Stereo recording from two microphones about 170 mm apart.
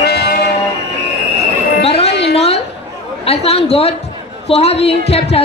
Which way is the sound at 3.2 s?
35° left (ahead or behind).